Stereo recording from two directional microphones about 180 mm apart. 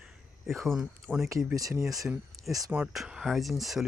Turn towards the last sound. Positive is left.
turn(degrees=0)  # may be behind; listen again after turning